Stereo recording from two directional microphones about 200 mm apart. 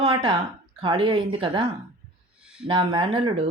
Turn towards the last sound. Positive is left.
turn(degrees=-25)  # may be behind; listen again after turning